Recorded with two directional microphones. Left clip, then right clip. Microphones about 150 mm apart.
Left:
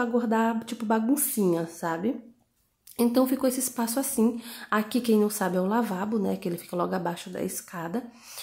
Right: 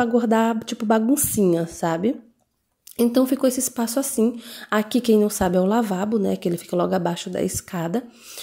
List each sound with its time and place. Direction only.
0.0 s a woman's voice: 35° right (ahead or behind)